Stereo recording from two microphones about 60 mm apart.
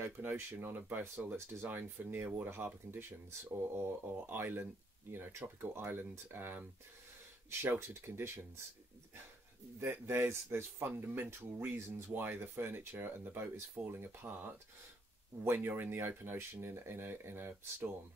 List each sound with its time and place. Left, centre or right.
0.0 s speech: right
9.8 s speech: right